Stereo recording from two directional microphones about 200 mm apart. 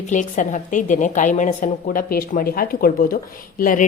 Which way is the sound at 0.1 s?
40° left (ahead or behind).